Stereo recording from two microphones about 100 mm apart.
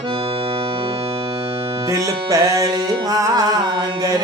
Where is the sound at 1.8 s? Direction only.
35° right (ahead or behind).